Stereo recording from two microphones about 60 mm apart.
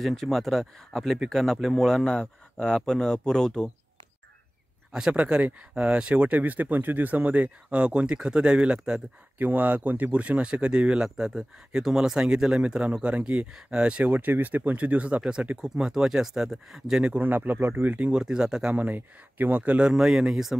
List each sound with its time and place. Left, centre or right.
0.0 s speech: centre
4.9 s speech: centre
9.4 s speech: right; by 17.1 s centre
17.1 s speech: right
18.2 s speech: centre
18.8 s speech: right
19.9 s speech: centre